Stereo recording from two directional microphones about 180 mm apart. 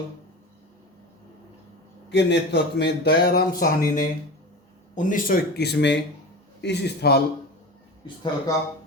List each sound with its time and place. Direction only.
2.0 s a man's voice: 75° left (ahead or behind)
8.0 s speech: 25° left (ahead or behind)